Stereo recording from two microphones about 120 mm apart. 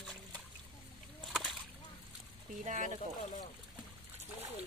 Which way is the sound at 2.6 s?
90° right.